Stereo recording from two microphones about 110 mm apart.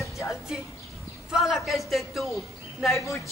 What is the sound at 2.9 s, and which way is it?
Speech, 30° left (ahead or behind).